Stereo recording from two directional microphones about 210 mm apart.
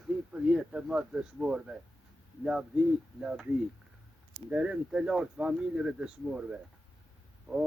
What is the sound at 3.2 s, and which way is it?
Speech, 5° right (ahead or behind).